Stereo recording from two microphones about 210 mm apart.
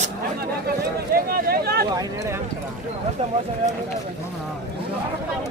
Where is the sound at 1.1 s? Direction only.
45° right (ahead or behind).